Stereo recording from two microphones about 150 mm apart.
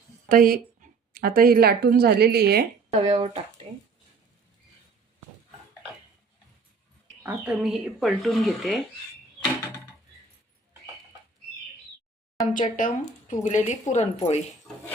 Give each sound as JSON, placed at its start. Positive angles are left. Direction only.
{"t": 0.3, "sound": "a woman's voice", "side_deg": -75}
{"t": 2.9, "sound": "speech", "side_deg": -45}
{"t": 7.2, "sound": "speech", "side_deg": -10}
{"t": 12.5, "sound": "a woman's voice", "side_deg": 60}